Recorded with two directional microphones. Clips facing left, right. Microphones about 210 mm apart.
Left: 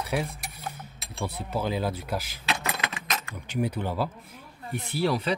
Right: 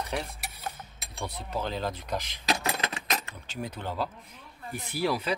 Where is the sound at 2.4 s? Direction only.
35° right (ahead or behind).